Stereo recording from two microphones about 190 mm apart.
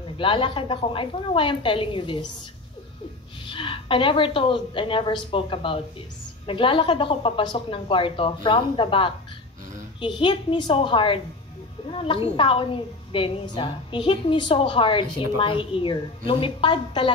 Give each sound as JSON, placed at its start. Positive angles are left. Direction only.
{"t": 0.0, "sound": "a woman's voice", "side_deg": 25}
{"t": 3.4, "sound": "a woman's voice", "side_deg": 25}